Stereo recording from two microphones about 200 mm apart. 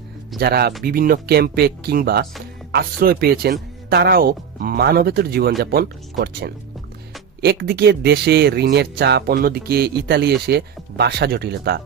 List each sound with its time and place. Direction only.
0.3 s speech: 50° right (ahead or behind)